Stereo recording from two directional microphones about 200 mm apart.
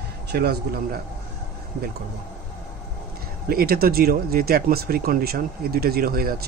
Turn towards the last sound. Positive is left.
turn(degrees=-50)  # may be behind; listen again after turning